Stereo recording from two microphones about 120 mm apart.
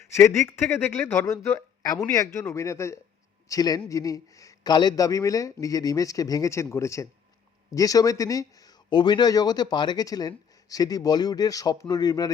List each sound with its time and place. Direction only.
0.0 s a man's voice: 25° left (ahead or behind)